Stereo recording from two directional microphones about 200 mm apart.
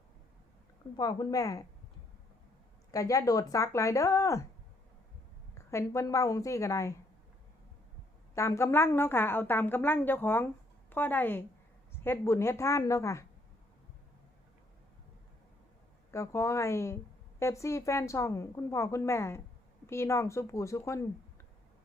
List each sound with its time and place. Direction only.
0.9 s a woman's voice: 20° left (ahead or behind)
2.9 s a woman's voice: 15° left (ahead or behind)
5.7 s a woman's voice: 15° left (ahead or behind)
8.4 s a woman's voice: 15° left (ahead or behind)
16.1 s a woman's voice: 15° left (ahead or behind)